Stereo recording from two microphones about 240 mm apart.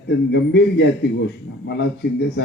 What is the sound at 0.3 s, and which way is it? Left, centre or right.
A man's voice, left.